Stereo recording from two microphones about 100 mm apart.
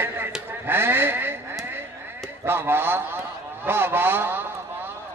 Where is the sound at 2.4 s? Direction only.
20° right (ahead or behind).